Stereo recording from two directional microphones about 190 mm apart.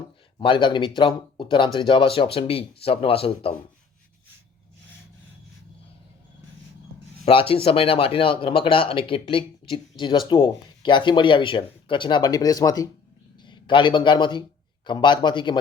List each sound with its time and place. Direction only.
0.3 s speech: 25° left (ahead or behind)
7.3 s speech: 30° left (ahead or behind)